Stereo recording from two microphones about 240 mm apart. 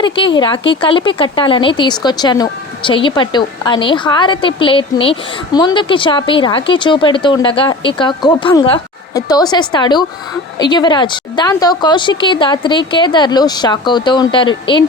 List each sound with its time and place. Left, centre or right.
0.0 s speech: centre